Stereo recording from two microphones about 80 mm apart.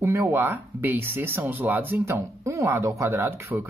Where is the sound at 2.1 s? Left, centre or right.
Right.